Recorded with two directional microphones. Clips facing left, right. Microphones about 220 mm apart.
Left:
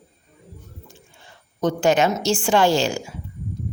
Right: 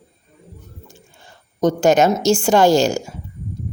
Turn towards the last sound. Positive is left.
turn(degrees=-45)  # may be behind; listen again after turning